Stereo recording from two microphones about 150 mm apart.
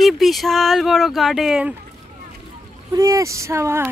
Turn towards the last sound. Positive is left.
turn(degrees=-20)  # may be behind; listen again after turning